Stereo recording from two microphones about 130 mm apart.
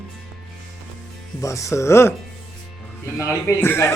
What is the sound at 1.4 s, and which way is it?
Speech, 25° left (ahead or behind).